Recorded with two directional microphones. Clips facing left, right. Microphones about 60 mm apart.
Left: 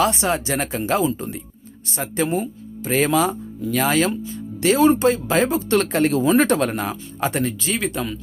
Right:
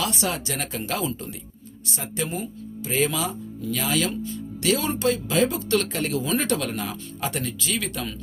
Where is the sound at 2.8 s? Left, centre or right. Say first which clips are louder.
Left 6 dB; left.